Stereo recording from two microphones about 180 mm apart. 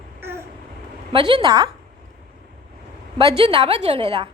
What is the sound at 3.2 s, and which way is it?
A woman's voice, 30° right (ahead or behind).